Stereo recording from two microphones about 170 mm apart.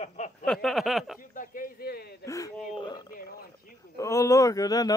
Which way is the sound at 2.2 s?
20° left (ahead or behind).